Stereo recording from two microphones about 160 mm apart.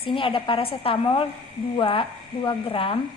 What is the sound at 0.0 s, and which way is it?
A woman's voice, 35° left (ahead or behind).